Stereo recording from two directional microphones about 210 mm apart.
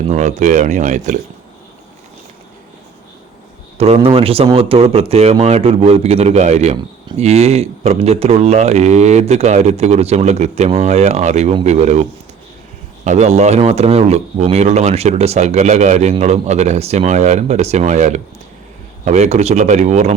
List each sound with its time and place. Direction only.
0.1 s speech: 35° right (ahead or behind)
3.8 s speech: 30° right (ahead or behind)
13.1 s speech: 35° right (ahead or behind)